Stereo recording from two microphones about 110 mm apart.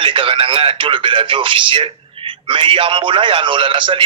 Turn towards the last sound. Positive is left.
turn(degrees=-50)  # may be behind; listen again after turning